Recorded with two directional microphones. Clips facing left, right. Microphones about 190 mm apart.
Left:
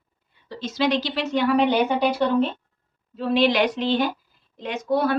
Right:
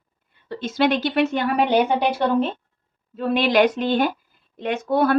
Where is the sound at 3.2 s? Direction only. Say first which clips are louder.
Right 2 dB; 50° right (ahead or behind).